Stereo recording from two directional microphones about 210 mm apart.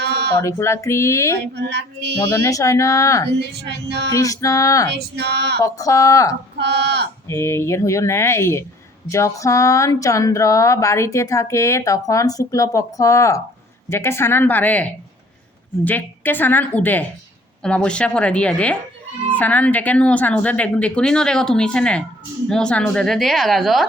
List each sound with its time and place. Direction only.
0.0 s a sound: 50° right (ahead or behind)
0.4 s speech: 15° left (ahead or behind)
1.5 s female singing: 55° right (ahead or behind)
2.3 s speech: 15° left (ahead or behind)
3.8 s female singing: 50° right (ahead or behind)
4.1 s speech: 15° left (ahead or behind)
4.9 s female singing: 50° right (ahead or behind)
5.6 s speech: 15° left (ahead or behind)
6.6 s female singing: 55° right (ahead or behind)
7.3 s speech: 10° left (ahead or behind)